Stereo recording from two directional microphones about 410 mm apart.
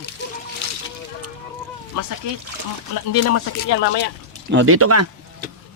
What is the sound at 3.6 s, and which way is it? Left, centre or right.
Speech, left.